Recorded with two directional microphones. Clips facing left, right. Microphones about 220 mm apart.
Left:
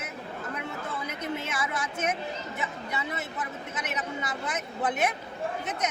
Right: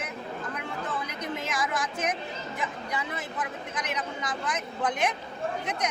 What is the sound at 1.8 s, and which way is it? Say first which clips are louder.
Speech: even; 25° left (ahead or behind).